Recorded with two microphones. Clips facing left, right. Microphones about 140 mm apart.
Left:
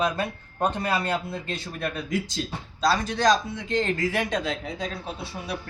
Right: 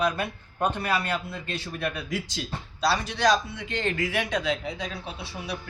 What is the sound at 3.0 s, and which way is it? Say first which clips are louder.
A man's voice: left 1 dB; 40° left (ahead or behind).